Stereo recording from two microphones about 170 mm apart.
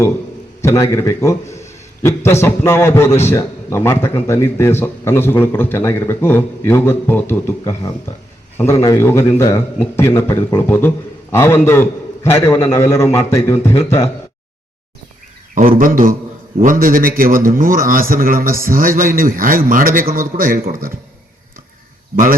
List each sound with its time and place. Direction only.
0.6 s a man's voice: 15° left (ahead or behind)
15.5 s a man's voice: 55° right (ahead or behind)
22.1 s speech: 55° right (ahead or behind)